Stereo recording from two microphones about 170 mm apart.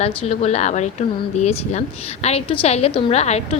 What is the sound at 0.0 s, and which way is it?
A woman's voice, 40° left (ahead or behind).